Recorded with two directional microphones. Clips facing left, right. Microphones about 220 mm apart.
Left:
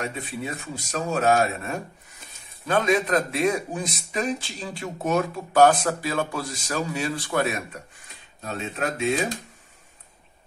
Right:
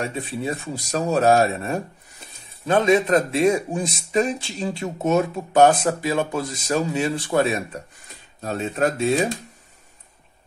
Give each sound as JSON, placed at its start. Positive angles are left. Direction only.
{"t": 0.0, "sound": "speech", "side_deg": -30}
{"t": 8.4, "sound": "speech", "side_deg": -40}